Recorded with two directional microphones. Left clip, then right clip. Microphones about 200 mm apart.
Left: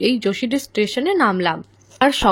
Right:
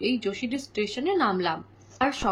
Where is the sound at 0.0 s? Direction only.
40° left (ahead or behind).